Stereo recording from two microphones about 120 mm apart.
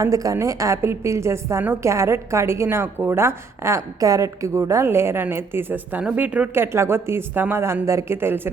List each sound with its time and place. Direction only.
0.0 s a woman's voice: 30° right (ahead or behind)